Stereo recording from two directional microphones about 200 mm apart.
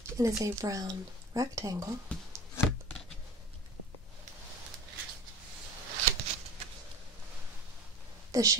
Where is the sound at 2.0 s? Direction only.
5° left (ahead or behind).